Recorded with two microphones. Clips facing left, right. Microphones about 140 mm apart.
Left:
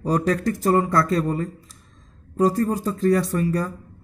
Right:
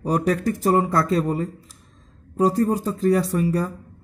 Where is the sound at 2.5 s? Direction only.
30° right (ahead or behind).